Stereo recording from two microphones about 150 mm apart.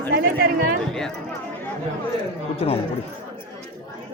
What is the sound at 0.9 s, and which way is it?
Chatter, 5° left (ahead or behind).